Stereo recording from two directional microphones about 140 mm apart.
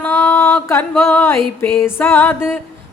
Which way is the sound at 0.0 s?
15° left (ahead or behind).